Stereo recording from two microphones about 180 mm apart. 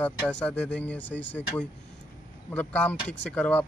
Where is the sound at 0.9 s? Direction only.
85° left.